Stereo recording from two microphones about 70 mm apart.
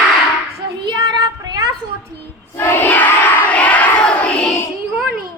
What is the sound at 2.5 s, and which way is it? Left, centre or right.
Crowd, left.